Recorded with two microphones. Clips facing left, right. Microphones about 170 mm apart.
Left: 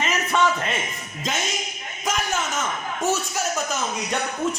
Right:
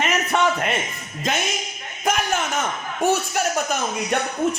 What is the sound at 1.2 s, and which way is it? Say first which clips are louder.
Speech: right 4 dB; 60° right (ahead or behind).